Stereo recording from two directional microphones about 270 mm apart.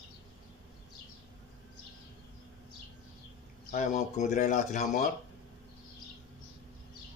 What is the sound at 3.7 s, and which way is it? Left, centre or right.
Speech, left.